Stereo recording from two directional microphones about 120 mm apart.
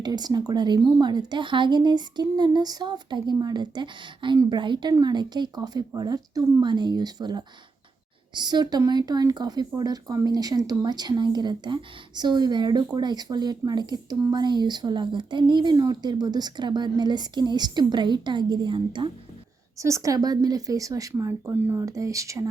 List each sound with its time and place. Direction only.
0.0 s speech: 35° right (ahead or behind)
19.8 s a woman's voice: 25° right (ahead or behind)